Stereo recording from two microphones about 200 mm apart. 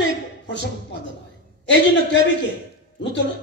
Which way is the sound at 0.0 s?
65° left (ahead or behind).